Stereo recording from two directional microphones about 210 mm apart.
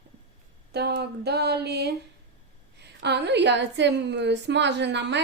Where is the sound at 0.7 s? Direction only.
50° right (ahead or behind).